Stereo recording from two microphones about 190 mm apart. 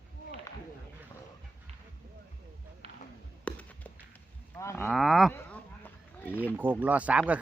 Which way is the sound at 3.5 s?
5° left (ahead or behind).